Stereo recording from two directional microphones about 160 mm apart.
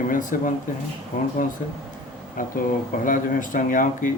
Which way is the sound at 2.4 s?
55° left (ahead or behind).